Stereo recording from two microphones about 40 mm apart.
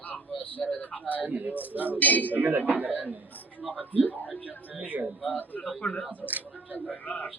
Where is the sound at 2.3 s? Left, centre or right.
Right.